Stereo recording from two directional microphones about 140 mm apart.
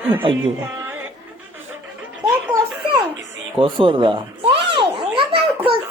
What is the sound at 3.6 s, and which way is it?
Children playing, 40° right (ahead or behind).